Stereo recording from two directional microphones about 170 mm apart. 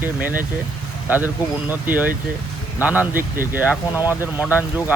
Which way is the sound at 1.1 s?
10° right (ahead or behind).